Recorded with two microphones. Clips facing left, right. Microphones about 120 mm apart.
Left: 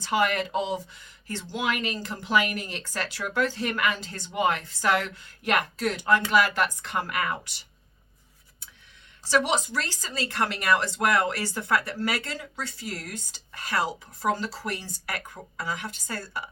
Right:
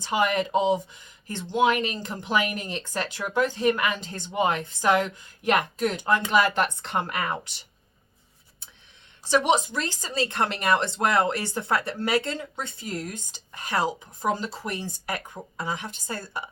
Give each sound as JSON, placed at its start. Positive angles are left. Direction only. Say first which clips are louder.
{"t": 0.0, "sound": "a woman's voice", "louder": "right 1 dB", "side_deg": -15}
{"t": 9.2, "sound": "a woman's voice", "louder": "right 3 dB", "side_deg": -20}